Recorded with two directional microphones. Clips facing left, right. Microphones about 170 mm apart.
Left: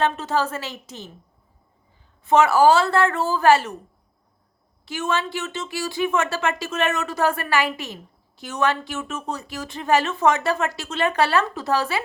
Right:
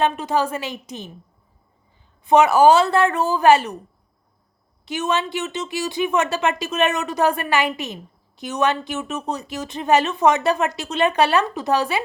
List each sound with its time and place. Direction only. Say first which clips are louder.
0.0 s a woman's voice: right 2 dB; 15° right (ahead or behind)
2.2 s a woman's voice: right 2 dB; 15° right (ahead or behind)
4.9 s speech: right 2 dB; 20° right (ahead or behind)